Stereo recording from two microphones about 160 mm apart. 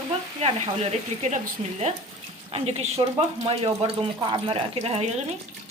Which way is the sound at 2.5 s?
40° right (ahead or behind).